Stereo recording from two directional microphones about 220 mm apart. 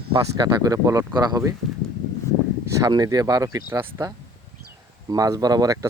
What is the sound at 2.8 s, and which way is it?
Speech, 15° right (ahead or behind).